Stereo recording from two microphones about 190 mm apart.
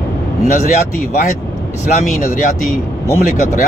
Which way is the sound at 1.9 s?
45° left (ahead or behind).